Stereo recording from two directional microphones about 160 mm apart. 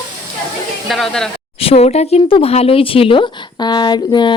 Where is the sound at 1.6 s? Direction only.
40° left (ahead or behind).